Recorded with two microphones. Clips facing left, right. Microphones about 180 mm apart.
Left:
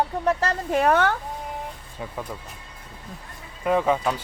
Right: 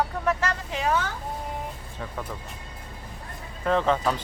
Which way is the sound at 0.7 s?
60° left (ahead or behind).